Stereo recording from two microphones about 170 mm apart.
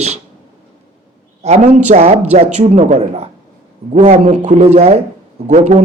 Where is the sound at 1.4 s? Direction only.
40° right (ahead or behind).